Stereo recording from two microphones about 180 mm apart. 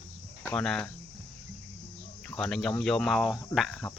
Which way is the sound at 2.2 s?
5° left (ahead or behind).